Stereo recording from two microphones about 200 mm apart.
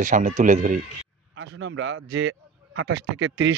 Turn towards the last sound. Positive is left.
turn(degrees=-65)  # may be behind; listen again after turning